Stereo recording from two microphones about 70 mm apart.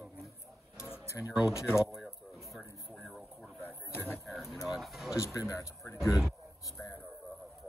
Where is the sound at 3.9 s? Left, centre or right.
Left.